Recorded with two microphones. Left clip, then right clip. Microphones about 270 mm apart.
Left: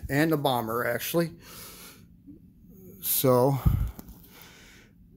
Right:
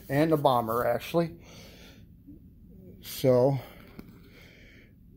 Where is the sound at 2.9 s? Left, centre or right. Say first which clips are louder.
Left 1 dB; left.